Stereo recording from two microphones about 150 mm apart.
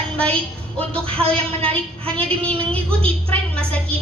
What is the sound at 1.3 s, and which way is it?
A woman's voice, 10° left (ahead or behind).